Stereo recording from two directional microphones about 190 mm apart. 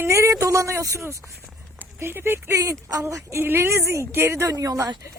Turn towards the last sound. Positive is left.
turn(degrees=-15)  # may be behind; listen again after turning